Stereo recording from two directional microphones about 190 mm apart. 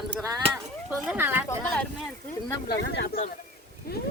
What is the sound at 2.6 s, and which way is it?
Speech, 60° left (ahead or behind).